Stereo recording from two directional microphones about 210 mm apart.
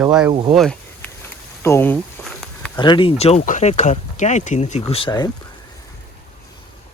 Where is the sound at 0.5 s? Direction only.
5° left (ahead or behind).